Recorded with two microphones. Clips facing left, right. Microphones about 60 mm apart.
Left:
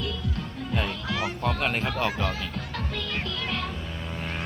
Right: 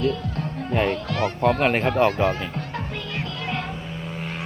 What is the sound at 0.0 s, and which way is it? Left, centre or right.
Music, right.